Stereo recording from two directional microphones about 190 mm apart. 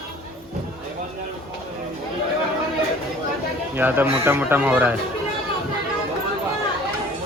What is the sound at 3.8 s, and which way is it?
Speech, 10° right (ahead or behind).